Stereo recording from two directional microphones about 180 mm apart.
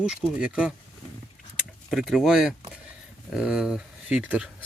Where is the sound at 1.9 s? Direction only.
Centre (ahead or behind).